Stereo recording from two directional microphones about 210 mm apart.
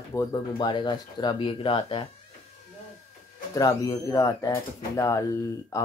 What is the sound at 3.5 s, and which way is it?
Speech, 15° left (ahead or behind).